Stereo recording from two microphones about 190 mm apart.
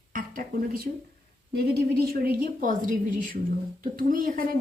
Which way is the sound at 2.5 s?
45° right (ahead or behind).